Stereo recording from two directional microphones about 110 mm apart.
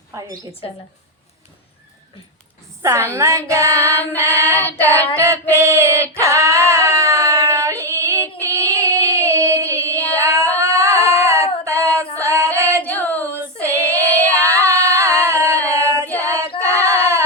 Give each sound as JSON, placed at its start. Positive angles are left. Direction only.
{"t": 2.8, "sound": "child singing", "side_deg": -25}
{"t": 5.1, "sound": "female singing", "side_deg": -25}
{"t": 10.1, "sound": "child singing", "side_deg": -30}
{"t": 11.1, "sound": "female singing", "side_deg": -25}
{"t": 12.8, "sound": "female singing", "side_deg": 15}
{"t": 13.2, "sound": "female singing", "side_deg": -20}
{"t": 13.7, "sound": "child singing", "side_deg": -25}
{"t": 14.7, "sound": "singing", "side_deg": -25}
{"t": 15.7, "sound": "female singing", "side_deg": -25}